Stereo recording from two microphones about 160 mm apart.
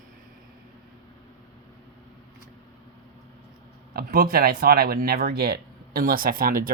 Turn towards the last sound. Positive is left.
turn(degrees=-65)  # may be behind; listen again after turning